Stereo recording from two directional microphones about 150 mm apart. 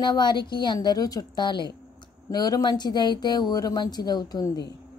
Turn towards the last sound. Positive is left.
turn(degrees=25)  # may be behind; listen again after turning